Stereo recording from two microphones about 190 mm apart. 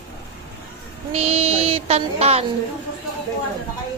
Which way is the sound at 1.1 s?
35° right (ahead or behind).